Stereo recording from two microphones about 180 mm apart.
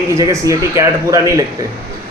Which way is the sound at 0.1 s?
15° right (ahead or behind).